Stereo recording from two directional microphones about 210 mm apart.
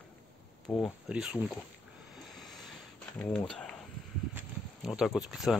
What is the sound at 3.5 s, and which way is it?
Snake, 5° left (ahead or behind).